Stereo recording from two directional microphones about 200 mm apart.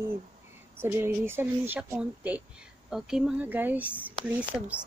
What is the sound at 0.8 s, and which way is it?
Speech, 10° right (ahead or behind).